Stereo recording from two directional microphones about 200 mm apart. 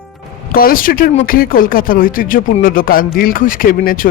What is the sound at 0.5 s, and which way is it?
Speech, 45° left (ahead or behind).